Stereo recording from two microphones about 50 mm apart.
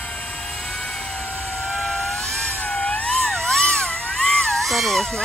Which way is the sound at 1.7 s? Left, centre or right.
Centre.